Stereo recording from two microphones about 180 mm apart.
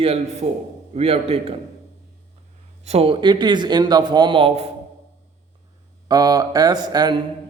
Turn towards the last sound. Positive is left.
turn(degrees=-25)  # may be behind; listen again after turning